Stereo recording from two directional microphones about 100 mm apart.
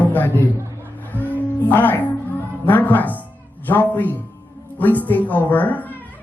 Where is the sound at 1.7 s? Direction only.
20° left (ahead or behind).